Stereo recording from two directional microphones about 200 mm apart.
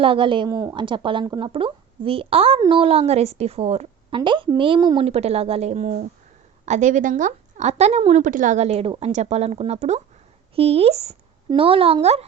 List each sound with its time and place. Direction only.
0.0 s a woman's voice: 25° right (ahead or behind)